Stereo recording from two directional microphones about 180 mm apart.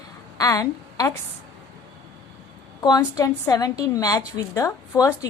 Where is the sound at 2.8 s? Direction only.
20° left (ahead or behind).